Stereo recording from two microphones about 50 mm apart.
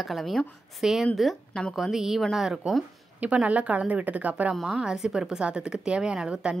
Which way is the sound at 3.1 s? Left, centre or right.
Right.